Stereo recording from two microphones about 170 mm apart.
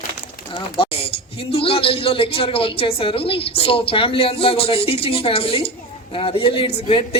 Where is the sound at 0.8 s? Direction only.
35° left (ahead or behind).